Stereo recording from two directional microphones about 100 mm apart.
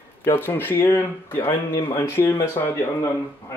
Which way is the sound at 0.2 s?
25° left (ahead or behind).